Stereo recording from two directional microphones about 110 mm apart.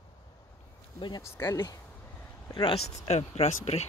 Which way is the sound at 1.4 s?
35° left (ahead or behind).